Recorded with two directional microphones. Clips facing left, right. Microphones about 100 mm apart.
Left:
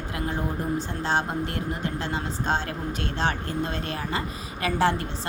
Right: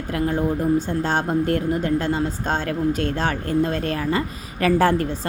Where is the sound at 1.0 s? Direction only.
45° right (ahead or behind).